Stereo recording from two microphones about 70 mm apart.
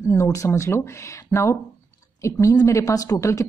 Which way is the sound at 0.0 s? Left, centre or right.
Left.